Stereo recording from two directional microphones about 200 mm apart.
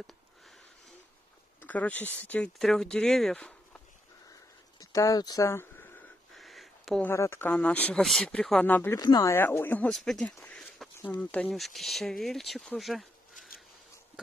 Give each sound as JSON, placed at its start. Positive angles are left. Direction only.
{"t": 1.6, "sound": "speech", "side_deg": 5}
{"t": 4.7, "sound": "speech", "side_deg": 15}
{"t": 6.3, "sound": "a sound", "side_deg": 0}
{"t": 7.1, "sound": "speech", "side_deg": 10}